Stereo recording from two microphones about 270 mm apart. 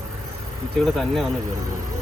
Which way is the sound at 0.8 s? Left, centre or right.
Centre.